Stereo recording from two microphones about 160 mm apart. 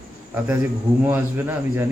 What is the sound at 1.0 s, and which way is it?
Speech, 15° right (ahead or behind).